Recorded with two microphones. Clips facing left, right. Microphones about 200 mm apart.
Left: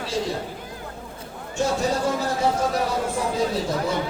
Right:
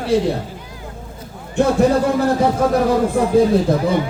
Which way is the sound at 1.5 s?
55° right (ahead or behind).